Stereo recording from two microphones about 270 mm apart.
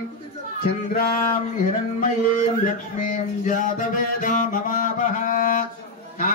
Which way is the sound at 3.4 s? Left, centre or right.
Left.